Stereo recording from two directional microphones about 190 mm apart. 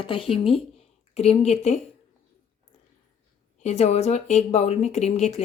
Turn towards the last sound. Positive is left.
turn(degrees=35)  # may be behind; listen again after turning